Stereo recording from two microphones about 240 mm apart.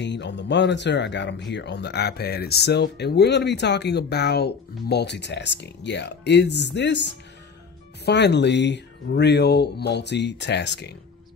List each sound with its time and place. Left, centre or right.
0.0 s speech: left